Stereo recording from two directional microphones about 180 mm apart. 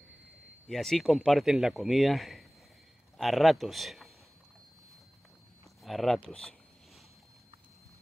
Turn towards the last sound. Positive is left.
turn(degrees=5)  # may be behind; listen again after turning